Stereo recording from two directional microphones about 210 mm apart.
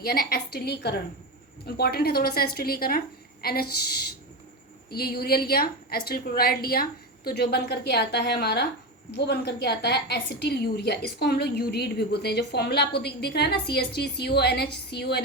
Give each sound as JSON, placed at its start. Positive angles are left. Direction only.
{"t": 0.0, "sound": "a woman's voice", "side_deg": 45}